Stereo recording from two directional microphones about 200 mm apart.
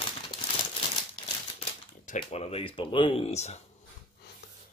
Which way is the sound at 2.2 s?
30° left (ahead or behind).